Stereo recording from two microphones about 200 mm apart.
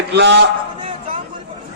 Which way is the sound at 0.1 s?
60° right (ahead or behind).